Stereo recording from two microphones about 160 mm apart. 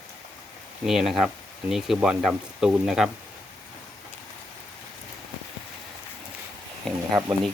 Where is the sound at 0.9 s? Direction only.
Centre (ahead or behind).